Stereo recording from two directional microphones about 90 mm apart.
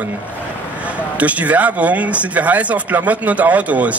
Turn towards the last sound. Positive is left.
turn(degrees=-15)  # may be behind; listen again after turning